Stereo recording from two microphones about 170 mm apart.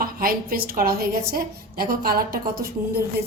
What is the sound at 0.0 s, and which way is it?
A woman's voice, 60° right (ahead or behind).